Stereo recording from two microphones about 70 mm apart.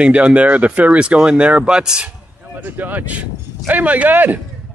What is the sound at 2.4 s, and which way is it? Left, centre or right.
Speech, right.